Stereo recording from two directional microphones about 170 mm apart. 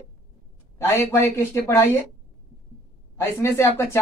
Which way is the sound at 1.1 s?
15° left (ahead or behind).